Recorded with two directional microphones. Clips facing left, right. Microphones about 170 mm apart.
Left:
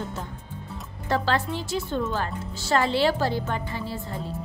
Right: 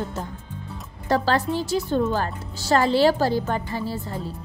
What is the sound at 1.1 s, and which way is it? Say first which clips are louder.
A woman's voice: right 4 dB; 40° right (ahead or behind).